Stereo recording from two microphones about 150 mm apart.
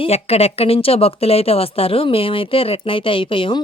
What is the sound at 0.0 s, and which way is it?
Speech, 40° left (ahead or behind).